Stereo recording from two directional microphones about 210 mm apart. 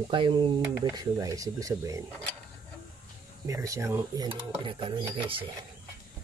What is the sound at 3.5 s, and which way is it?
Dishes, 15° right (ahead or behind).